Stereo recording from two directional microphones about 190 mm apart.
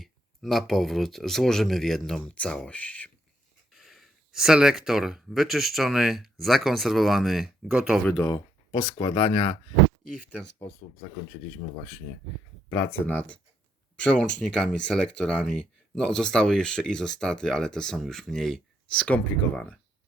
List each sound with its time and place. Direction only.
0.0 s speech: centre (ahead or behind)
8.2 s speech: 20° left (ahead or behind)
13.1 s speech: 5° left (ahead or behind)